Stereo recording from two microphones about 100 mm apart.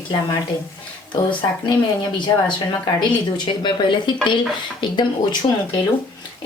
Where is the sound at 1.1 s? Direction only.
50° left (ahead or behind).